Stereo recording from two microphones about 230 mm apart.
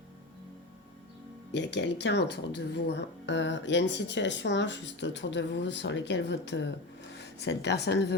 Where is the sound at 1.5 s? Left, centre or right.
Left.